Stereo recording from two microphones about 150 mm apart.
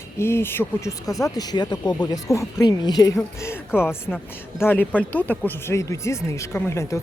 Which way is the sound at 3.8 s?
15° left (ahead or behind).